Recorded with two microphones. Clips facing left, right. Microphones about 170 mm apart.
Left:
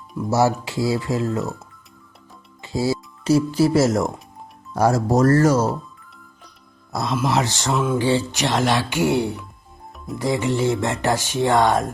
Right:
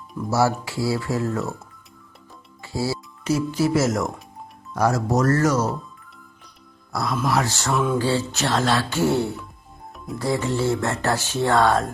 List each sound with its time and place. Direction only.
0.3 s speech: 20° left (ahead or behind)
2.6 s music: 20° left (ahead or behind)
3.2 s speech: 35° left (ahead or behind)
6.9 s speech: 20° left (ahead or behind)